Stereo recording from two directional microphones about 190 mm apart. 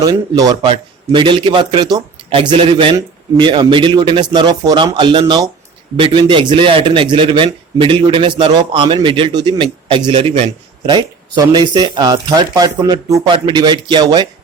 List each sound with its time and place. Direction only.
0.0 s a man's voice: 20° right (ahead or behind)